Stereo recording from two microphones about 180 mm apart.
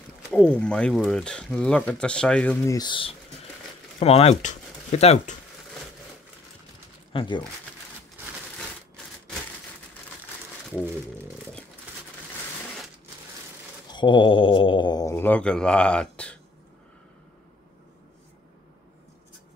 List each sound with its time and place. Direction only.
0.3 s speech: 5° left (ahead or behind); by 5.3 s 35° left (ahead or behind)
7.1 s speech: 25° left (ahead or behind)
8.5 s typewriter: 5° left (ahead or behind)
13.8 s speech: 25° left (ahead or behind); by 16.3 s 5° left (ahead or behind)